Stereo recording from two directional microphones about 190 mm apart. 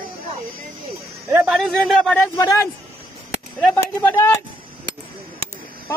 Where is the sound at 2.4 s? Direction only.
20° left (ahead or behind).